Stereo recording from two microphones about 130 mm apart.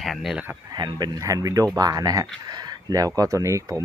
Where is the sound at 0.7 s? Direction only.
35° right (ahead or behind).